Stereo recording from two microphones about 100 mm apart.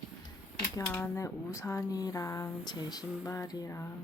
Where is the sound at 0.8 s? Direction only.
25° left (ahead or behind).